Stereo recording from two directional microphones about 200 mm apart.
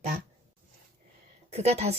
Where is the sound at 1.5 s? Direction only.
30° right (ahead or behind).